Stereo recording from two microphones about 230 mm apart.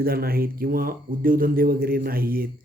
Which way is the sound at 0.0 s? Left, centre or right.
Right.